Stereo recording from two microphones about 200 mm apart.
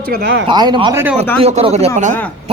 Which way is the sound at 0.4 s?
20° right (ahead or behind).